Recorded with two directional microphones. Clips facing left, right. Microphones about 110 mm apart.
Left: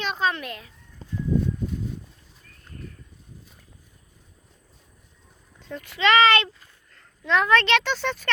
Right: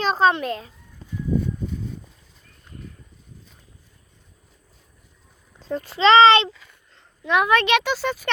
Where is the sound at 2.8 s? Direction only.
5° left (ahead or behind).